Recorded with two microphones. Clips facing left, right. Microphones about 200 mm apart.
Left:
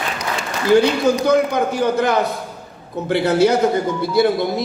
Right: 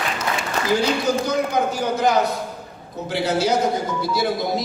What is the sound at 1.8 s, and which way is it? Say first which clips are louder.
Speech: left 2 dB; 60° left (ahead or behind).